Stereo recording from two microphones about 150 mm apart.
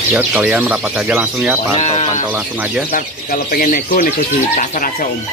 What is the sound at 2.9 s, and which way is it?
Speech, 75° left (ahead or behind).